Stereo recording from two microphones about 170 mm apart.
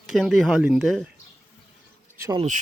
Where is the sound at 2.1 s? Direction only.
15° right (ahead or behind).